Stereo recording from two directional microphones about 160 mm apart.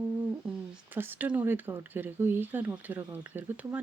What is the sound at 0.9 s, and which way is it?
Speech, 10° right (ahead or behind).